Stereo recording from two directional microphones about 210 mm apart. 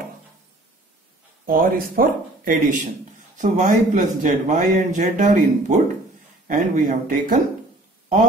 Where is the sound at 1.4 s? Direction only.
45° right (ahead or behind).